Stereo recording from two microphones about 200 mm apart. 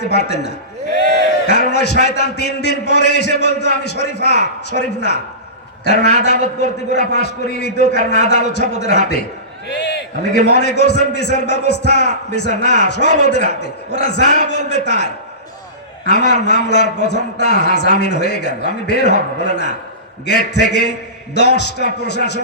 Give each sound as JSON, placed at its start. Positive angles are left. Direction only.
{"t": 0.0, "sound": "a man's voice", "side_deg": 55}
{"t": 9.6, "sound": "a sound", "side_deg": 60}
{"t": 10.4, "sound": "a man's voice", "side_deg": 55}